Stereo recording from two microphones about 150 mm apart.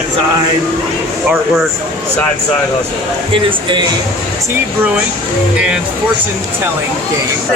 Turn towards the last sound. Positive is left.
turn(degrees=-5)  # may be behind; listen again after turning